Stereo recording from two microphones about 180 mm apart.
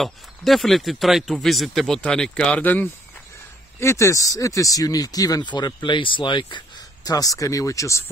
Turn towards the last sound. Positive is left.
turn(degrees=15)  # may be behind; listen again after turning